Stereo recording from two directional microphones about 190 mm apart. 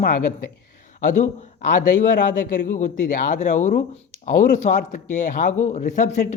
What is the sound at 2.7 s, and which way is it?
Speech, 40° left (ahead or behind).